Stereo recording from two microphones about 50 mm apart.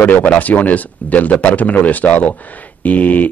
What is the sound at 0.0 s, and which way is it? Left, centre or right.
Speech, left.